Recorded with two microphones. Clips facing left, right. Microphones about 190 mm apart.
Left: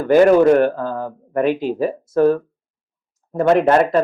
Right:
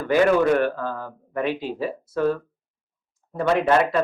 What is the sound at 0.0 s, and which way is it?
Speech, 45° left (ahead or behind).